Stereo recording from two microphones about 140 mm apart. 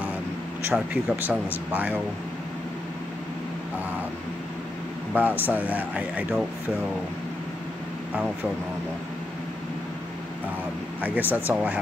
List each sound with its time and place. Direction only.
0.7 s speech: 15° right (ahead or behind)
5.1 s speech: 15° right (ahead or behind)
11.0 s speech: 10° right (ahead or behind)